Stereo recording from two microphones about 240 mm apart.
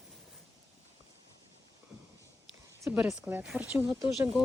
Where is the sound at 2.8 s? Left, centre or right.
Centre.